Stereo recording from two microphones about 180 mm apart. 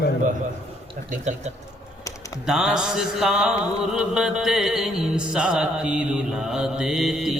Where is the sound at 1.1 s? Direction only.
40° right (ahead or behind).